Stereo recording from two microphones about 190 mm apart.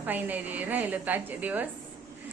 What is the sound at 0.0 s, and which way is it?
A woman's voice, 10° right (ahead or behind).